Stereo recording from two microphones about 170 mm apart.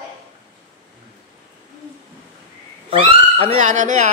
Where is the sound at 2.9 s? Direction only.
35° right (ahead or behind).